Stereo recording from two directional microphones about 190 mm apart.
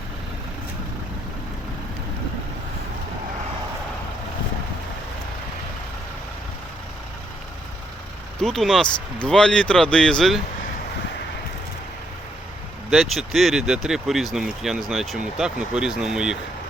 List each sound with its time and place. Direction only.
8.4 s speech: centre (ahead or behind)
12.9 s speech: centre (ahead or behind)